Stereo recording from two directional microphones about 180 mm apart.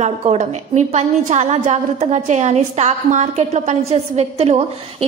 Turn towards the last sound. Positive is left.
turn(degrees=-35)  # may be behind; listen again after turning